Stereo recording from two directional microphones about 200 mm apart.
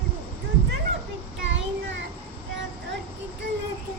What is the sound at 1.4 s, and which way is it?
Child singing, 65° right (ahead or behind).